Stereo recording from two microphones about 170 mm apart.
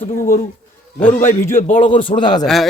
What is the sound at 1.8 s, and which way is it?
Speech, 30° left (ahead or behind).